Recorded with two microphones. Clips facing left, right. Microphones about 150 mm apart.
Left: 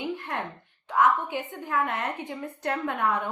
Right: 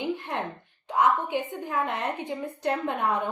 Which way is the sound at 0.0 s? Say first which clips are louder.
Right 2 dB; 25° right (ahead or behind).